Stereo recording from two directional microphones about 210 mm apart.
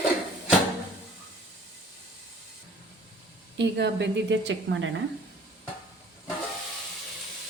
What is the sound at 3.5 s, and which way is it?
A woman's voice, 55° right (ahead or behind).